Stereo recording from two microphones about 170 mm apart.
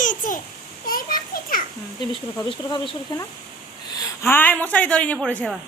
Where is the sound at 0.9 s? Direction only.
55° left (ahead or behind).